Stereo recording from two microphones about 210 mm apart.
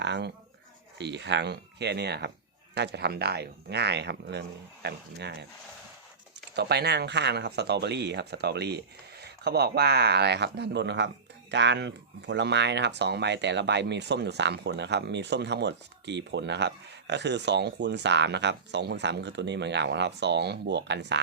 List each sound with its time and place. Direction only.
0.0 s a sound: 55° right (ahead or behind)
0.9 s speech: 55° right (ahead or behind)
6.6 s speech: 50° right (ahead or behind)